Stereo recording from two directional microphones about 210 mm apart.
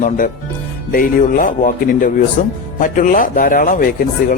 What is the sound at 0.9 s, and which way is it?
Speech, 40° left (ahead or behind).